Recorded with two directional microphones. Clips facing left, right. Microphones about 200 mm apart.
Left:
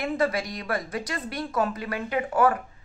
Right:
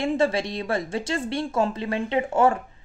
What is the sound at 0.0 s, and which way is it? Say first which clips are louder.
Speech: right 3 dB; 25° right (ahead or behind).